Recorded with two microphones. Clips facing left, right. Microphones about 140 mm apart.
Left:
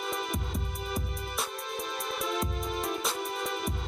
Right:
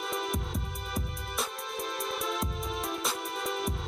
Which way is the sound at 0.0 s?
Centre (ahead or behind).